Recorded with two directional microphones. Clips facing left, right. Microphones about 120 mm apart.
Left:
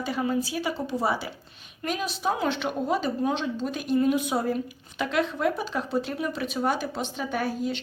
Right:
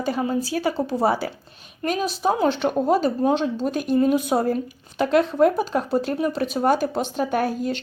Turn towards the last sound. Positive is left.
turn(degrees=-50)  # may be behind; listen again after turning